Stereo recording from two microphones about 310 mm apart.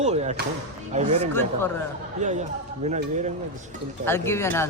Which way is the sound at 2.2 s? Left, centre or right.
Right.